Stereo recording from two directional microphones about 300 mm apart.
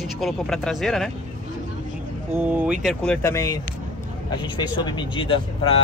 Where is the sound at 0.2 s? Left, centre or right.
Centre.